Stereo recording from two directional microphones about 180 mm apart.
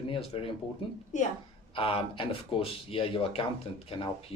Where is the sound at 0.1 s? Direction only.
30° left (ahead or behind).